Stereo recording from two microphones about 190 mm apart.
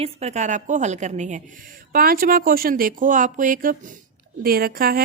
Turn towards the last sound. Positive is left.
turn(degrees=-50)  # may be behind; listen again after turning